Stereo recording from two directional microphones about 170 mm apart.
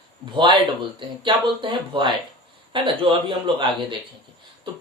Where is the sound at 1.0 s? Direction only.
30° right (ahead or behind).